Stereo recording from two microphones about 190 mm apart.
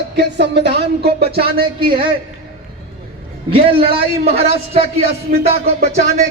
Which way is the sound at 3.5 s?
30° right (ahead or behind).